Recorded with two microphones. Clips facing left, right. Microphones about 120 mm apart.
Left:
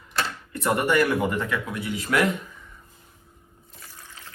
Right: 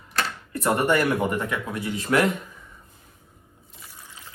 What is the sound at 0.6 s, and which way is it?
Speech, 20° right (ahead or behind).